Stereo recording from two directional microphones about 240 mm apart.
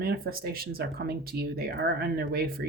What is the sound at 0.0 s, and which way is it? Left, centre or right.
Speech, right.